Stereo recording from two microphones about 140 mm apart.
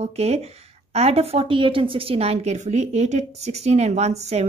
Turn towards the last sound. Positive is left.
turn(degrees=-50)  # may be behind; listen again after turning